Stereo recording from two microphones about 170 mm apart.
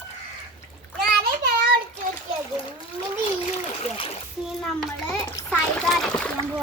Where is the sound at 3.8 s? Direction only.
35° left (ahead or behind).